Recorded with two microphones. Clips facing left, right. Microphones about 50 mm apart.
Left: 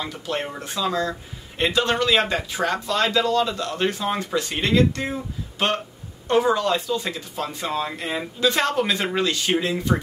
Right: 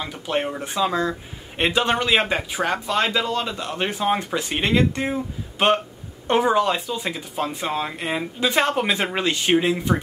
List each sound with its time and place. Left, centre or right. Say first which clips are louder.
0.0 s speech: right 3 dB; centre